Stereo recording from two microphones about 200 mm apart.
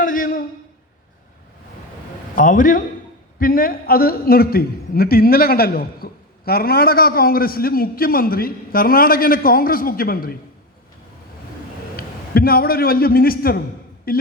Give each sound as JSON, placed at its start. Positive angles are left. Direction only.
{"t": 0.0, "sound": "a sound", "side_deg": 45}
{"t": 2.3, "sound": "a man's voice", "side_deg": 40}
{"t": 11.9, "sound": "a man's voice", "side_deg": 50}